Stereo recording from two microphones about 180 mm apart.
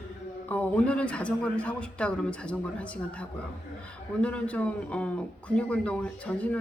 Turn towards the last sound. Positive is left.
turn(degrees=10)  # may be behind; listen again after turning